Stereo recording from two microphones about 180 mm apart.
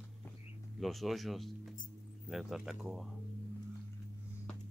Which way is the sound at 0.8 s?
Centre (ahead or behind).